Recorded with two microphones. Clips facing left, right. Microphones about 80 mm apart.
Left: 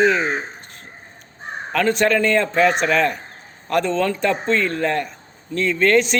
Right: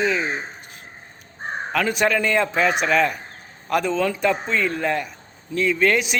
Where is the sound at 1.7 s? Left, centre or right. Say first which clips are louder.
Left 3 dB; centre.